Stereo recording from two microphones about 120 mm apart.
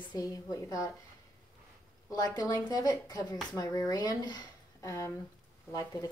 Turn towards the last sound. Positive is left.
turn(degrees=30)  # may be behind; listen again after turning